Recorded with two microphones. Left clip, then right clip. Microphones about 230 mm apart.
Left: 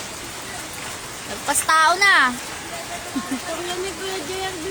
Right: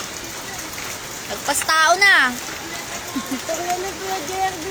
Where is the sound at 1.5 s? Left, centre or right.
Centre.